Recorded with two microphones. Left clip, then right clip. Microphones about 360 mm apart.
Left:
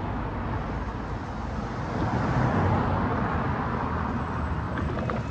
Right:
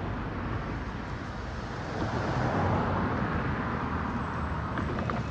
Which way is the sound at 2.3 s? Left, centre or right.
Centre.